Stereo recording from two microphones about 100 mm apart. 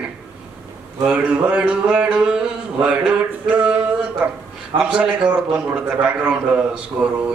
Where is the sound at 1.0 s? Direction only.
10° right (ahead or behind).